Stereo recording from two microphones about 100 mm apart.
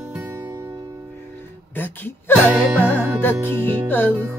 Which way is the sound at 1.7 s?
20° left (ahead or behind).